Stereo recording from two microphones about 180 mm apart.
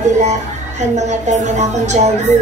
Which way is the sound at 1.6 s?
40° right (ahead or behind).